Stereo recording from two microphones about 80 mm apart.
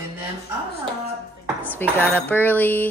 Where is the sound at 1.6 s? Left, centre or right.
Left.